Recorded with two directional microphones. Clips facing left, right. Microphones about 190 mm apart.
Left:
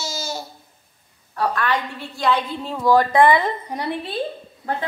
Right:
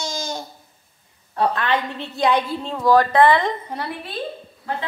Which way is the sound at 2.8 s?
15° left (ahead or behind).